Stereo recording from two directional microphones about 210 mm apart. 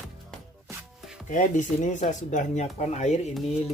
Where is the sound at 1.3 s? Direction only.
35° left (ahead or behind).